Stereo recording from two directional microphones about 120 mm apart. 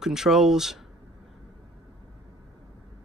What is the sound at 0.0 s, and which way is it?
Speech, 5° right (ahead or behind).